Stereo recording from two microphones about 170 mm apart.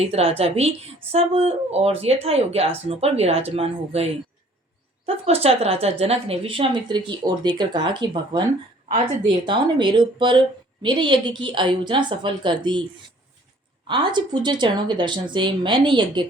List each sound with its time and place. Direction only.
0.0 s speech: 35° right (ahead or behind)
13.8 s speech: 25° right (ahead or behind)